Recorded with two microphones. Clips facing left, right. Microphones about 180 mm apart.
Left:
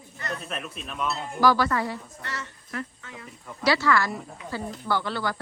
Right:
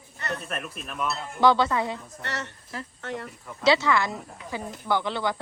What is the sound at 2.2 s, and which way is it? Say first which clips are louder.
A woman's voice: right 3 dB; 70° right (ahead or behind).